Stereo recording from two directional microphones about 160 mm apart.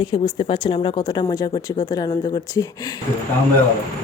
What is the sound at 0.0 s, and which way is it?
A woman's voice, 35° left (ahead or behind).